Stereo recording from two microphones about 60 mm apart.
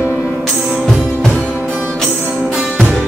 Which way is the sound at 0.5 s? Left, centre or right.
Centre.